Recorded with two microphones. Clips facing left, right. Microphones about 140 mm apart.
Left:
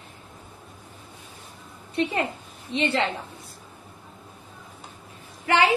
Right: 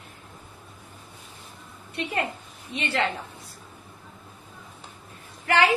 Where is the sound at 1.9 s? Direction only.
30° left (ahead or behind).